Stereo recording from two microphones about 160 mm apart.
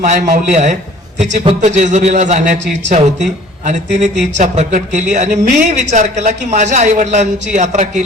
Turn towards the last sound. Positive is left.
turn(degrees=-50)  # may be behind; listen again after turning